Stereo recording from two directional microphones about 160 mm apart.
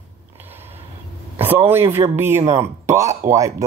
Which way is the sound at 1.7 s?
15° right (ahead or behind).